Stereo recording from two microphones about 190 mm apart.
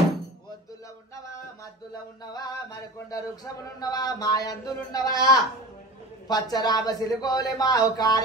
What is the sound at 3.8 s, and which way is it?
A man's voice, 20° left (ahead or behind).